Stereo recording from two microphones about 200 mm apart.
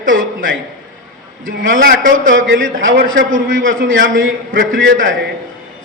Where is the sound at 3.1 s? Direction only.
80° right.